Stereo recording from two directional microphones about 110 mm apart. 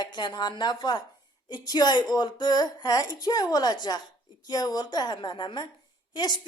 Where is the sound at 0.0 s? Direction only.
40° left (ahead or behind).